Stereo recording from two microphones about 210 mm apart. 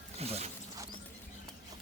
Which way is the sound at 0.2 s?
30° right (ahead or behind).